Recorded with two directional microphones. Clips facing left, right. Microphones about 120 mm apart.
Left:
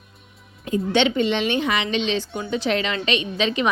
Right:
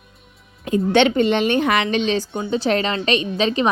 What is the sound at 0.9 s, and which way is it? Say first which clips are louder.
Speech: right 4 dB; 50° right (ahead or behind).